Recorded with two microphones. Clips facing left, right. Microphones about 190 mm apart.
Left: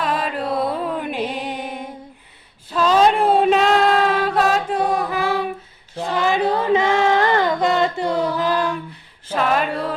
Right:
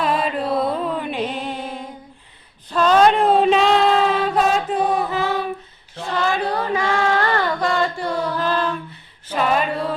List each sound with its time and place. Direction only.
0.0 s music: centre (ahead or behind)
1.4 s music: 15° left (ahead or behind)
2.7 s chant: 5° left (ahead or behind)
5.1 s humming: 10° left (ahead or behind)
6.0 s female singing: 15° left (ahead or behind)
9.4 s a sound: centre (ahead or behind)